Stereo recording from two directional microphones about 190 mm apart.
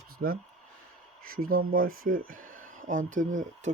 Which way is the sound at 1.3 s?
50° right (ahead or behind).